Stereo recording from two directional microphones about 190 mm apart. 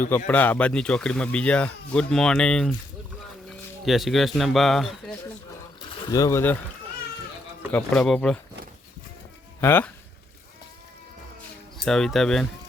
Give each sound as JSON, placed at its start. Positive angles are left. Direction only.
{"t": 0.3, "sound": "speech", "side_deg": 10}
{"t": 3.8, "sound": "speech", "side_deg": 0}
{"t": 5.9, "sound": "speech", "side_deg": 20}
{"t": 7.7, "sound": "speech", "side_deg": 5}
{"t": 9.6, "sound": "speech", "side_deg": 10}
{"t": 11.8, "sound": "speech", "side_deg": 0}